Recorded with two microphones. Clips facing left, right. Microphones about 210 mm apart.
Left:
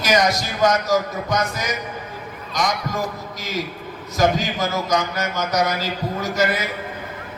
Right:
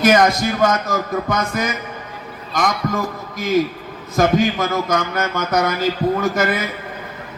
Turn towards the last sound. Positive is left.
turn(degrees=-55)  # may be behind; listen again after turning